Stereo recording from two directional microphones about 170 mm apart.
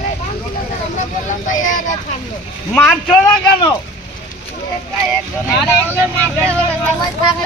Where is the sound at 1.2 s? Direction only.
50° left (ahead or behind).